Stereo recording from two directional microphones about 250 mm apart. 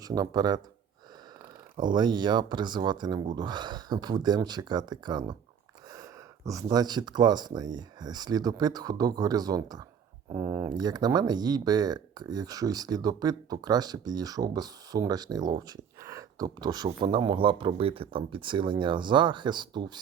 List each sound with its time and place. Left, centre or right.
0.0 s speech: centre
1.9 s speech: centre